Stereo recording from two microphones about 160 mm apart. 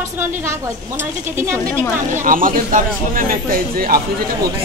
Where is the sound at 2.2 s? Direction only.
60° right (ahead or behind).